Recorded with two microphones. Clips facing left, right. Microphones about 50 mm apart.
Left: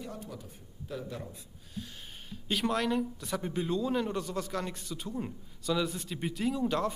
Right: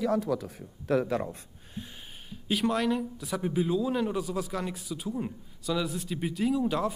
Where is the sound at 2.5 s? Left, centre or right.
Centre.